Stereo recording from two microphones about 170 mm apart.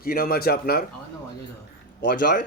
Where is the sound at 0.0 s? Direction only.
60° left (ahead or behind).